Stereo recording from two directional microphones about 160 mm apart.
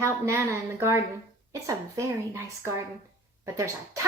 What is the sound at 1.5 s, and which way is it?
A woman's voice, 20° right (ahead or behind).